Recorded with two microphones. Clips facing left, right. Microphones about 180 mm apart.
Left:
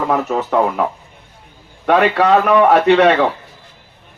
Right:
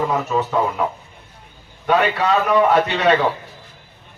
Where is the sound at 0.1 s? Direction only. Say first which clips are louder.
Left 3 dB; 70° left (ahead or behind).